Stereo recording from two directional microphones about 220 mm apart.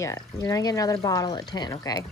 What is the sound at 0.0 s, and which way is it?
Speech, 15° left (ahead or behind).